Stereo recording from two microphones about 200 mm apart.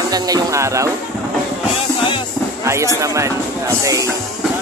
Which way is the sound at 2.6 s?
15° right (ahead or behind).